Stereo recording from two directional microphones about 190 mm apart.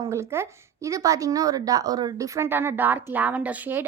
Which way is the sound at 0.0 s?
15° right (ahead or behind).